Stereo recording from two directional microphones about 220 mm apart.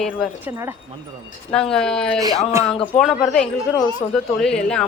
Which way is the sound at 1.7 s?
5° left (ahead or behind).